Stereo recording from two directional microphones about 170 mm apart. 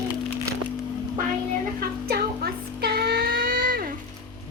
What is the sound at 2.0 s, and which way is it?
Music, 65° right (ahead or behind).